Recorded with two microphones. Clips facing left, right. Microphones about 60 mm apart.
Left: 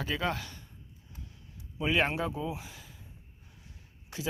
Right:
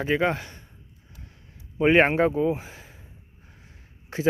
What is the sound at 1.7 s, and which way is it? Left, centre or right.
Speech, right.